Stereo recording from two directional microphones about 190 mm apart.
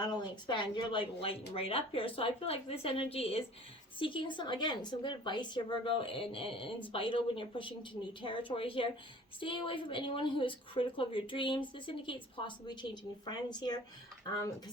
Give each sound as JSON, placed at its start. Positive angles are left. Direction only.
{"t": 0.0, "sound": "a woman's voice", "side_deg": 20}